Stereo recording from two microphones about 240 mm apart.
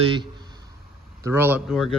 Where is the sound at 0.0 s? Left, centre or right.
Centre.